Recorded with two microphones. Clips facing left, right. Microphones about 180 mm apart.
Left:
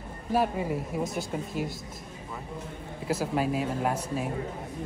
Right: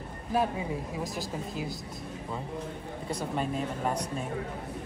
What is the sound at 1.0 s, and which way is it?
Speech, centre (ahead or behind).